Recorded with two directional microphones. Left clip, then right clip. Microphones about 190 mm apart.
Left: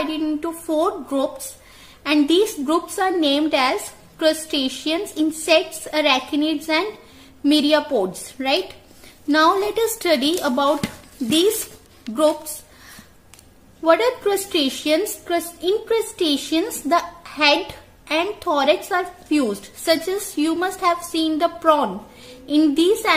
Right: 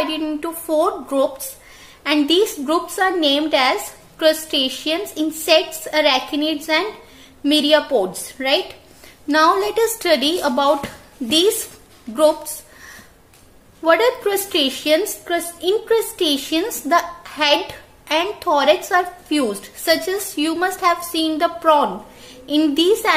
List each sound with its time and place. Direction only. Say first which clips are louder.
0.0 s a woman's voice: right 1 dB; 15° left (ahead or behind)
13.8 s a woman's voice: right 1 dB; 15° left (ahead or behind)